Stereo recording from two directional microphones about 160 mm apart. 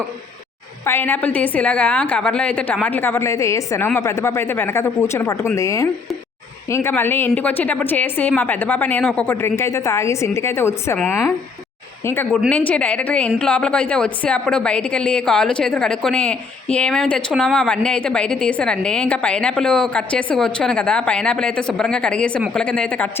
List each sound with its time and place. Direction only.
0.9 s a woman's voice: 15° left (ahead or behind)
10.9 s a woman's voice: 5° left (ahead or behind)